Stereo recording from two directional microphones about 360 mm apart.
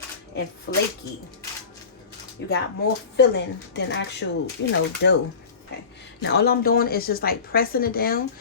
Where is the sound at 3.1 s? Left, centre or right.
Left.